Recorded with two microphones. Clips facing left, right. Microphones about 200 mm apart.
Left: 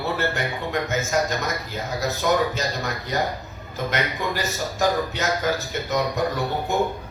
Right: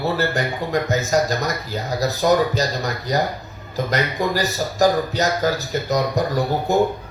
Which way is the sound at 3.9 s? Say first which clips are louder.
Right 4 dB; 35° right (ahead or behind).